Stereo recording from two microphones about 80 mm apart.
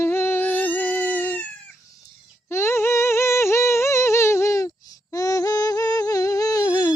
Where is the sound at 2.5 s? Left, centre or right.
Left.